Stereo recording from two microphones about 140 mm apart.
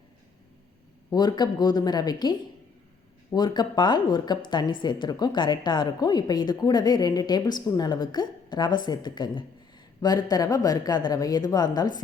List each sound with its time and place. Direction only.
1.1 s a woman's voice: 30° left (ahead or behind)
3.3 s a woman's voice: 30° left (ahead or behind)